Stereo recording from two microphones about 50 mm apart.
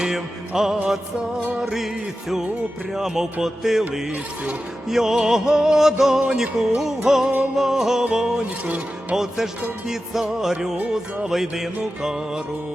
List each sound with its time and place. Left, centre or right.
0.0 s music: centre
2.9 s music: centre
8.4 s speech: right
9.1 s music: centre